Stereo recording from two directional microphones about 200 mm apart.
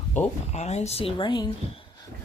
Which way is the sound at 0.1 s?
35° left (ahead or behind).